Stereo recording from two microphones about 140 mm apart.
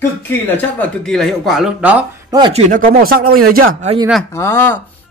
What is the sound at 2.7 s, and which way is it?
Speech, 90° right.